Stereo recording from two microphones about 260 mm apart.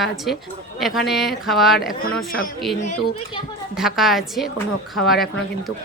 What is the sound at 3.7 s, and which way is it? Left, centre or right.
A woman's voice, centre.